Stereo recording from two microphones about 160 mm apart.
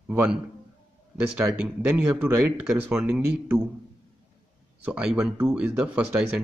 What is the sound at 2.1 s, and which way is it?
A man's voice, 10° right (ahead or behind).